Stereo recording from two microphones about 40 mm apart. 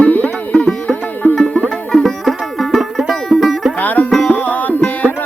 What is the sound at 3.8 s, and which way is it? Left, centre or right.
Music, left.